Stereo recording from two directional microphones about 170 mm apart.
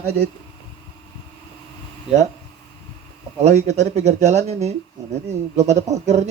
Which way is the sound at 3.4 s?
40° right (ahead or behind).